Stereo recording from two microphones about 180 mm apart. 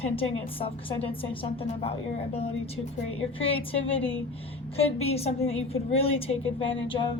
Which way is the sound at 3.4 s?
30° left (ahead or behind).